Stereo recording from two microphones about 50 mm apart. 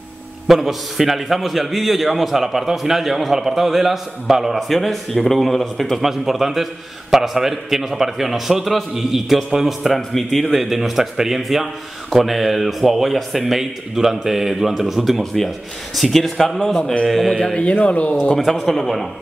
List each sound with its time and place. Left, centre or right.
0.5 s a man's voice: centre
17.6 s speech: left
18.7 s a man's voice: centre